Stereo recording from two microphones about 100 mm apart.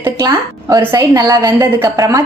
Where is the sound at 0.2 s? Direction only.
35° right (ahead or behind).